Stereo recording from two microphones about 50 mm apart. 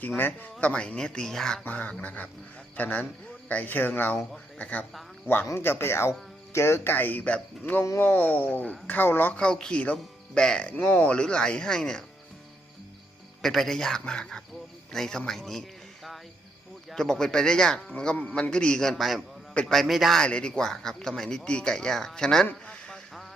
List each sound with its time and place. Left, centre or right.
0.2 s speech: left
0.6 s speech: left
1.6 s speech: left
5.5 s speech: left
6.9 s speech: left
9.3 s speech: centre
10.8 s speech: left
11.1 s speech: centre
13.4 s a man's voice: centre
16.9 s a man's voice: centre
20.1 s speech: centre
22.6 s a sound: left